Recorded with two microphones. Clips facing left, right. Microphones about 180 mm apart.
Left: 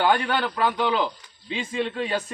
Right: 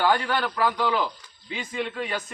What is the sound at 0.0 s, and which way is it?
A man's voice, 20° left (ahead or behind).